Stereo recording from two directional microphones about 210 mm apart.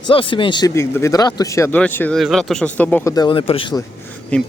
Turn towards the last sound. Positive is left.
turn(degrees=5)  # may be behind; listen again after turning